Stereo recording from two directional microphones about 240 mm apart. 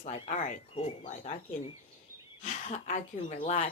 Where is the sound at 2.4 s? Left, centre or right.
Left.